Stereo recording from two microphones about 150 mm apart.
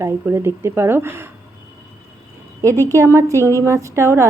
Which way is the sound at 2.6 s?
20° right (ahead or behind).